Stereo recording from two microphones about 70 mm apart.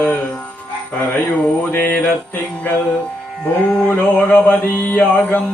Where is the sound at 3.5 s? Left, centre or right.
Left.